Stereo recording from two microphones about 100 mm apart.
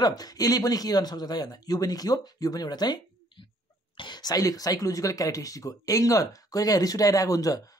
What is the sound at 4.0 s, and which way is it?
Speech, 45° left (ahead or behind).